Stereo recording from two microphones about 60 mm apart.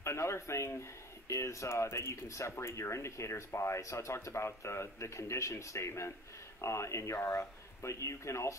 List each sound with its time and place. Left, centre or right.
0.0 s speech: left